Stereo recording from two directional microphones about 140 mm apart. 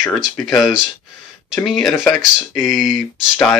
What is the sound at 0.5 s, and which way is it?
Speech, 5° right (ahead or behind).